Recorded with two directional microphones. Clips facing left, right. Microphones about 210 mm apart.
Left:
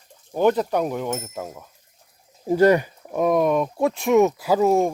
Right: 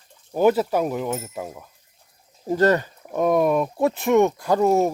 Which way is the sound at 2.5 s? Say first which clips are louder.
Left 3 dB; 10° left (ahead or behind).